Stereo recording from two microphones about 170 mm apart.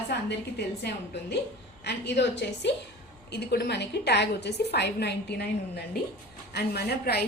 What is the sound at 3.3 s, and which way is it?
A woman's voice, 75° left (ahead or behind).